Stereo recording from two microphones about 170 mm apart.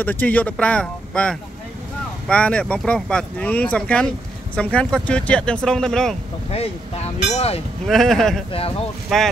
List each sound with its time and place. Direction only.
0.0 s speech: 10° left (ahead or behind)
6.5 s speech: 40° left (ahead or behind)
7.8 s speech: centre (ahead or behind)
8.5 s speech: 35° left (ahead or behind)
9.1 s speech: centre (ahead or behind)